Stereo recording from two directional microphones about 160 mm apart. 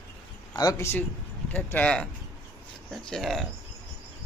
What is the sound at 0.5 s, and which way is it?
Speech, 25° left (ahead or behind).